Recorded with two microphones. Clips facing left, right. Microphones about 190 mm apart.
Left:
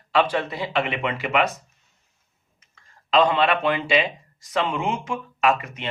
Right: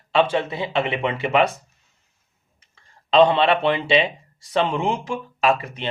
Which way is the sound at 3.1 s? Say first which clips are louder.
Right 4 dB; 30° right (ahead or behind).